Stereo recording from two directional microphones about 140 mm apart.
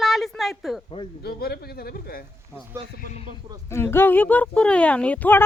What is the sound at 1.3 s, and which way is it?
Speech, 90° left.